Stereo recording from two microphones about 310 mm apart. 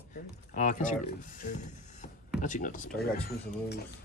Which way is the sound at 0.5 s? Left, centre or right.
Left.